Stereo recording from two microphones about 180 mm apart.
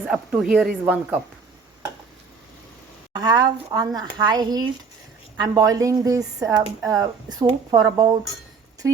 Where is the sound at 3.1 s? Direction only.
20° right (ahead or behind).